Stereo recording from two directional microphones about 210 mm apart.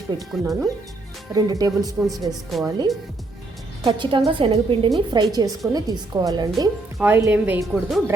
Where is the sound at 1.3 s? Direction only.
15° right (ahead or behind).